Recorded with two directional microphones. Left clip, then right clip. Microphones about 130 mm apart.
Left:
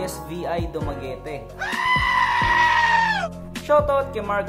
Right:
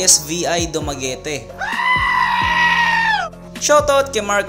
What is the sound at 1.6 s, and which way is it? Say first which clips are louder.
Goat: right 4 dB; 5° right (ahead or behind).